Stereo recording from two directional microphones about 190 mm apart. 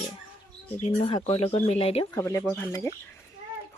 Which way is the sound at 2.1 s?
15° left (ahead or behind).